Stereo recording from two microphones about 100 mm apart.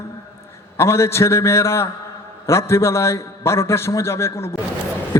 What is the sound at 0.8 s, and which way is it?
A man's voice, 25° left (ahead or behind).